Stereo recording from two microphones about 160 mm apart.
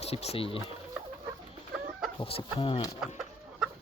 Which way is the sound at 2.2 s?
35° left (ahead or behind).